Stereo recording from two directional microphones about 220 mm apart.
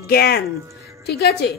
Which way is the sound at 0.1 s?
45° left (ahead or behind).